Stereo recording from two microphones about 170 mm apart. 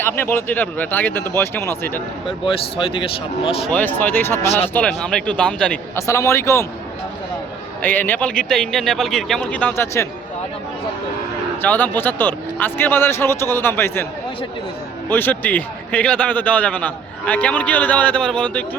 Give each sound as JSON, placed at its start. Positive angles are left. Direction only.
{"t": 0.0, "sound": "a man's voice", "side_deg": 10}
{"t": 2.2, "sound": "speech", "side_deg": 30}
{"t": 3.7, "sound": "a man's voice", "side_deg": 10}
{"t": 4.4, "sound": "speech", "side_deg": 40}
{"t": 4.7, "sound": "speech", "side_deg": 5}
{"t": 6.0, "sound": "a man's voice", "side_deg": 15}
{"t": 7.8, "sound": "a man's voice", "side_deg": 10}
{"t": 11.6, "sound": "a man's voice", "side_deg": 10}
{"t": 15.1, "sound": "a man's voice", "side_deg": 10}